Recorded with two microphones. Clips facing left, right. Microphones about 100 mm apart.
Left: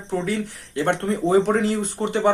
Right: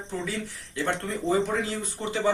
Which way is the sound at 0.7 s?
60° left (ahead or behind).